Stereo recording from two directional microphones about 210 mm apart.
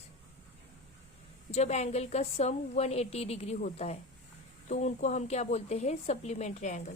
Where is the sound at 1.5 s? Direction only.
30° left (ahead or behind).